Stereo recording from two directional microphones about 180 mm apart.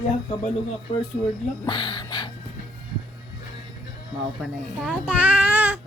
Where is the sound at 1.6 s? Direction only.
25° left (ahead or behind).